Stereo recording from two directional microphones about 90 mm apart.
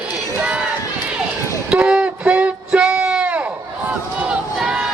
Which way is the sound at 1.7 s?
10° right (ahead or behind).